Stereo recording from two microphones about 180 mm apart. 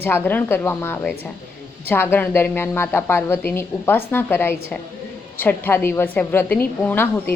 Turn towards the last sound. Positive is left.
turn(degrees=10)  # may be behind; listen again after turning